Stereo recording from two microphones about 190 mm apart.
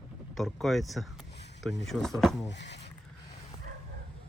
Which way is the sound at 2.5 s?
65° left (ahead or behind).